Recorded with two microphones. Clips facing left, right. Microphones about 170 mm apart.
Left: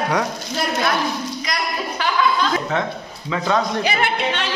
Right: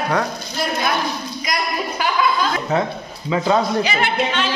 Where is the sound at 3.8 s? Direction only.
60° left (ahead or behind).